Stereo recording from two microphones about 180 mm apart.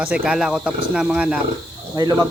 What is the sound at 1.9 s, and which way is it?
Speech, 20° right (ahead or behind).